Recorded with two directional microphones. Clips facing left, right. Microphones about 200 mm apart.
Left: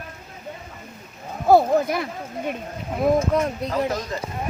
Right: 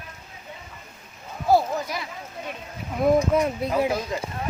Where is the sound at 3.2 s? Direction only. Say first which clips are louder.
Even; 10° right (ahead or behind).